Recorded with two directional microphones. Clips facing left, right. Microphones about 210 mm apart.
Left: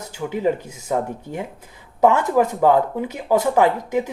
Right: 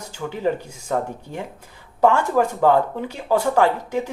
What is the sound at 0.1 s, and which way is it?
A woman's voice, 10° left (ahead or behind).